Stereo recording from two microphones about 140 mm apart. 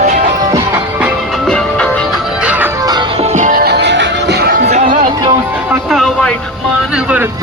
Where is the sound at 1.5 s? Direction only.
5° left (ahead or behind).